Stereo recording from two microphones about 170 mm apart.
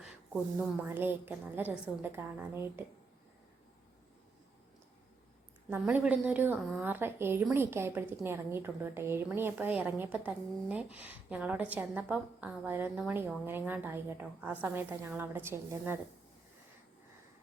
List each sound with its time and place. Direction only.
0.6 s a woman's voice: 10° right (ahead or behind)
5.7 s a woman's voice: 10° right (ahead or behind)